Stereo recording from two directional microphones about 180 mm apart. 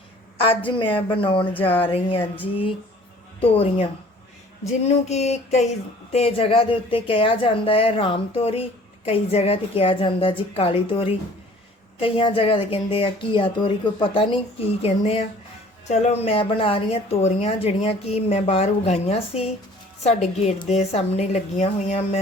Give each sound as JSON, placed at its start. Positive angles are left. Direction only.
{"t": 0.6, "sound": "a woman's voice", "side_deg": 30}
{"t": 3.4, "sound": "a woman's voice", "side_deg": 30}